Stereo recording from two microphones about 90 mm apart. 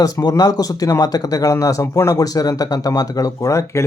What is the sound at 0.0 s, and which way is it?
Speech, 45° left (ahead or behind).